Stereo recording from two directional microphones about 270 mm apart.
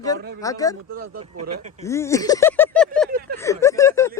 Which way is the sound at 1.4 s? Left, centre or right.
Right.